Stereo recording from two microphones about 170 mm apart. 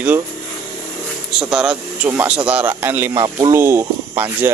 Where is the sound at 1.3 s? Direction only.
5° right (ahead or behind).